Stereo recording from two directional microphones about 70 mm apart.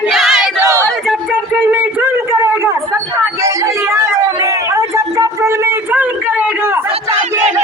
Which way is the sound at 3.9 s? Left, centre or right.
Right.